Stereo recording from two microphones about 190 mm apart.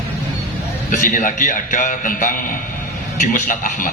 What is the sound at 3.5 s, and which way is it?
Speech, 45° left (ahead or behind).